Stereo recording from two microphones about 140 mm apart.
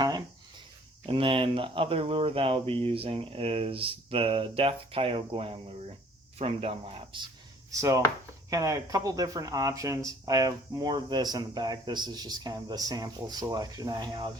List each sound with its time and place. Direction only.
1.0 s speech: 40° right (ahead or behind)
7.7 s speech: 25° right (ahead or behind)